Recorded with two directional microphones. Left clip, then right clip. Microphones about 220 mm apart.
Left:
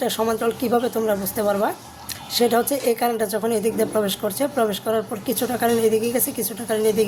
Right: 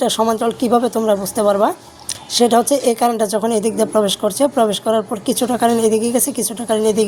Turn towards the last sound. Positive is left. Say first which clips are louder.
# right 4 dB
turn(degrees=-25)  # may be behind; listen again after turning